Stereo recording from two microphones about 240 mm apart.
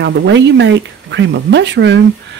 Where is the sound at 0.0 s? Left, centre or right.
Right.